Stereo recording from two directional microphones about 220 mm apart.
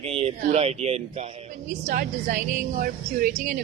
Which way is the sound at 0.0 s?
25° right (ahead or behind).